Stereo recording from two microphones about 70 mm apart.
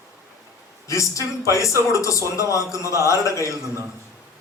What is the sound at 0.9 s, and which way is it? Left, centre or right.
A man's voice, left.